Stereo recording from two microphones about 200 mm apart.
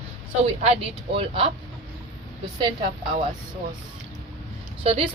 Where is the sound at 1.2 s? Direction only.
30° right (ahead or behind).